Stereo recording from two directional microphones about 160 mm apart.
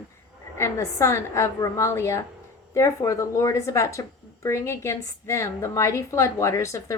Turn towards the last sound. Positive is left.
turn(degrees=20)  # may be behind; listen again after turning